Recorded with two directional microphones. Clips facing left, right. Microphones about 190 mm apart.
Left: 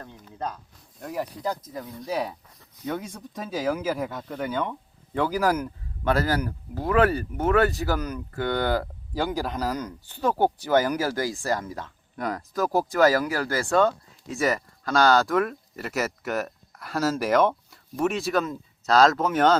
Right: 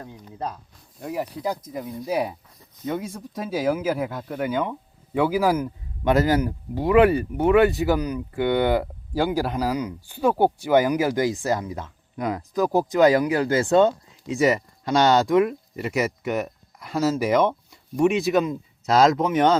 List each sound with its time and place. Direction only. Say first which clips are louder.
0.0 s speech: right 2 dB; 10° right (ahead or behind)
16.2 s speech: right 3 dB; 5° left (ahead or behind)
16.7 s speech: right 3 dB; 10° right (ahead or behind)
18.1 s speech: right 5 dB; centre (ahead or behind)